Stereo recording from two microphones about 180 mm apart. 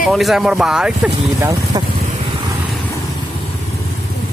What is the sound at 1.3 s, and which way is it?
Speech, 20° right (ahead or behind).